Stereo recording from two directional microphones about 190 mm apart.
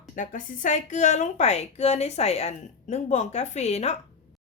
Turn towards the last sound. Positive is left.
turn(degrees=35)  # may be behind; listen again after turning